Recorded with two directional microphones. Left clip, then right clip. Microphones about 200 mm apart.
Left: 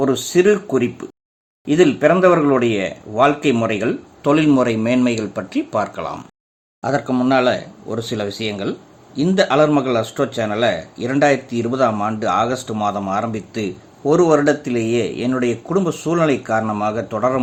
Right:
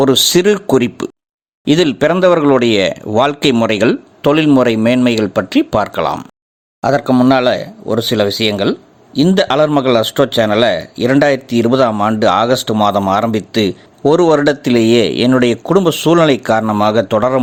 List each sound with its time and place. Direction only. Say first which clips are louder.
0.0 s speech: right 5 dB; 50° right (ahead or behind)